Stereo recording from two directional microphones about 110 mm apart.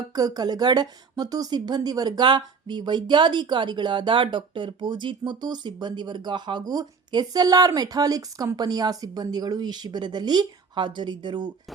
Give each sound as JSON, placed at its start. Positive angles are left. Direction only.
{"t": 0.1, "sound": "speech", "side_deg": -35}